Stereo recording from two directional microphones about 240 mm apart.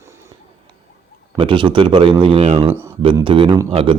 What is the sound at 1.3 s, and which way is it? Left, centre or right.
Speech, centre.